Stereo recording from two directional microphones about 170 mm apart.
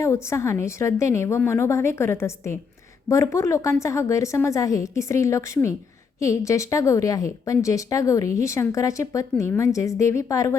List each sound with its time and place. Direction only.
0.0 s a woman's voice: 15° left (ahead or behind)